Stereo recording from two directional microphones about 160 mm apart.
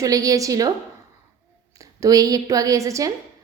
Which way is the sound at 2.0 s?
20° right (ahead or behind).